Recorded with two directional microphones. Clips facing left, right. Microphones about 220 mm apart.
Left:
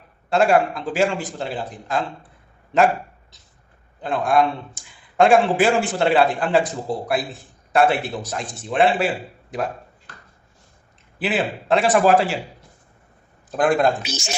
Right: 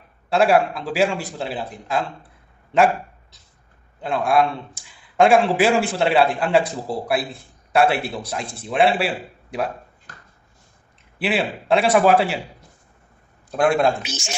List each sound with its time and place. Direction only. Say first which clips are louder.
0.3 s a man's voice: even; centre (ahead or behind)
4.0 s a man's voice: even; centre (ahead or behind)
11.2 s a man's voice: even; centre (ahead or behind)
13.5 s a man's voice: even; centre (ahead or behind)
14.0 s speech: left 2 dB; 40° left (ahead or behind)